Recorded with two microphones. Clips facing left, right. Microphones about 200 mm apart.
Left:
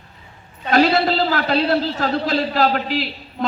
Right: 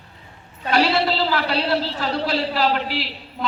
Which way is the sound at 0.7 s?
45° left (ahead or behind).